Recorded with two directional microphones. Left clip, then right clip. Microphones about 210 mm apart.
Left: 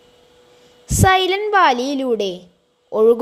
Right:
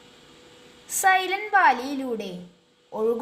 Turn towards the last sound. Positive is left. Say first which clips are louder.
# left 12 dB
turn(degrees=35)  # may be behind; listen again after turning